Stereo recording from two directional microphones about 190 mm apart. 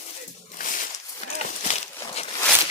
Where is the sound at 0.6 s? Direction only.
45° left (ahead or behind).